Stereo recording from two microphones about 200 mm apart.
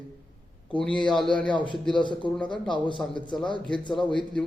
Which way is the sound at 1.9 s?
25° left (ahead or behind).